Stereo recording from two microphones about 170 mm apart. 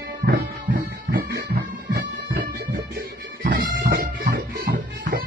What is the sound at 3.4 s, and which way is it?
Bagpipes, 60° right (ahead or behind).